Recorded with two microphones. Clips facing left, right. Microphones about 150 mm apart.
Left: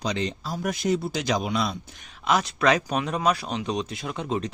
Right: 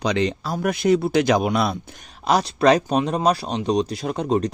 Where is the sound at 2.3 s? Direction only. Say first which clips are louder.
Right 5 dB; 35° right (ahead or behind).